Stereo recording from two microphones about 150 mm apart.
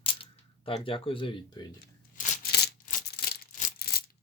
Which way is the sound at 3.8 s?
90° left.